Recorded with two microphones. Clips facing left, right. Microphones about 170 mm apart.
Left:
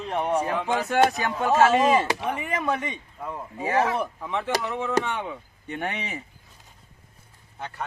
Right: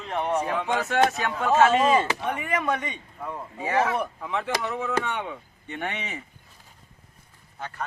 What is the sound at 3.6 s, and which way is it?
Speech, 40° left (ahead or behind).